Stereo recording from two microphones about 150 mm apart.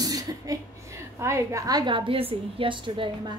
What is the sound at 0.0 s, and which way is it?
A woman's voice, 25° right (ahead or behind).